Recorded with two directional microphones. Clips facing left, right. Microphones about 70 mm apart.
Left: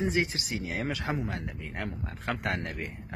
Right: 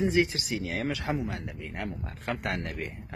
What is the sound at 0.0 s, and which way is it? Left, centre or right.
Speech, left.